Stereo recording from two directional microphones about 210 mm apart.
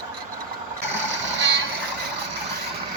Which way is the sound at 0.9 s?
60° right (ahead or behind).